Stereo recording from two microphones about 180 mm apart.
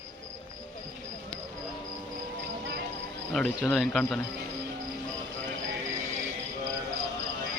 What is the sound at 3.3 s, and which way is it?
Speech, centre (ahead or behind).